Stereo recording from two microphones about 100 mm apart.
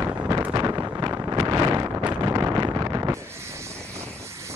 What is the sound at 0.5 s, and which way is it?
Wind noise, 40° right (ahead or behind).